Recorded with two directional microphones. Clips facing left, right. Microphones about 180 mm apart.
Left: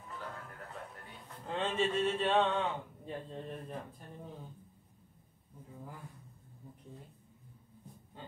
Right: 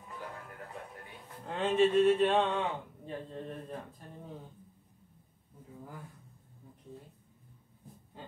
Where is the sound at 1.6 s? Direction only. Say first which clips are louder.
Right 7 dB; 10° right (ahead or behind).